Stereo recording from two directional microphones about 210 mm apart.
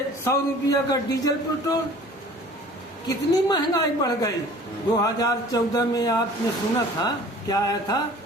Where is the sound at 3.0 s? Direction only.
20° left (ahead or behind).